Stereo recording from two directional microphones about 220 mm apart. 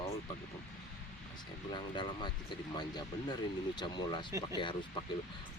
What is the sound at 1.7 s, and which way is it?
Speech, 20° left (ahead or behind).